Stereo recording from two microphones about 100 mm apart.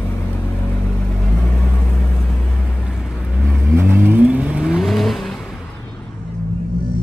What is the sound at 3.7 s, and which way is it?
Vehicle, 20° right (ahead or behind).